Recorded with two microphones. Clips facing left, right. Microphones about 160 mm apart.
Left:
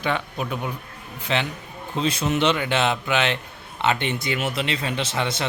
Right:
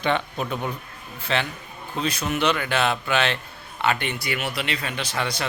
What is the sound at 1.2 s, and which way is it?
A man's voice, 20° left (ahead or behind).